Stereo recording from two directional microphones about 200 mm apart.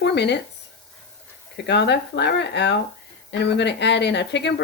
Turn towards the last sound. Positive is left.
turn(degrees=60)  # may be behind; listen again after turning